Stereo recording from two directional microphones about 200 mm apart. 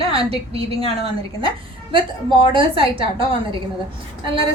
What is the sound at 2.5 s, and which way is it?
Speech, 25° right (ahead or behind).